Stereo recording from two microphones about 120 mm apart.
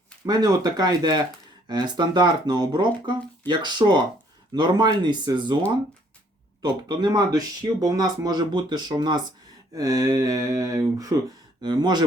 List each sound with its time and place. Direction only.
0.3 s speech: 35° right (ahead or behind)
9.7 s a sound: 30° right (ahead or behind)
11.6 s speech: 35° right (ahead or behind)